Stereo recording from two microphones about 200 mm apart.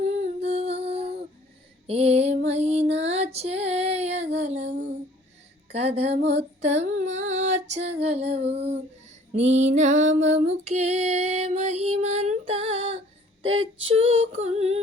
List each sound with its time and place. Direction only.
0.4 s music: 30° right (ahead or behind)
1.9 s female singing: 30° right (ahead or behind)
5.7 s music: 30° right (ahead or behind)
6.2 s female singing: 35° right (ahead or behind)
7.7 s music: 30° right (ahead or behind)
9.3 s female singing: 35° right (ahead or behind)
13.4 s child singing: 30° right (ahead or behind)
13.8 s music: 30° right (ahead or behind)